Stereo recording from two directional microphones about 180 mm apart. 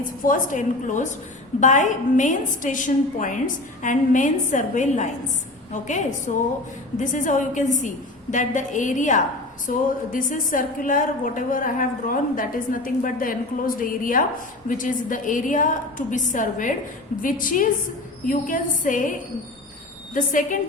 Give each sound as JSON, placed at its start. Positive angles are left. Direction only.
{"t": 0.3, "sound": "a woman's voice", "side_deg": 45}
{"t": 20.1, "sound": "a woman's voice", "side_deg": 45}